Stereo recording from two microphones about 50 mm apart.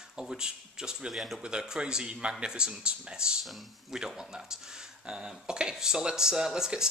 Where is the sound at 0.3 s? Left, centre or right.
Centre.